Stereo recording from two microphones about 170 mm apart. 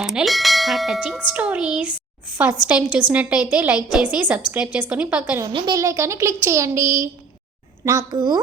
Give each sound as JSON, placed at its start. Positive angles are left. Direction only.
{"t": 0.0, "sound": "speech", "side_deg": 0}
{"t": 5.5, "sound": "a child's voice", "side_deg": -20}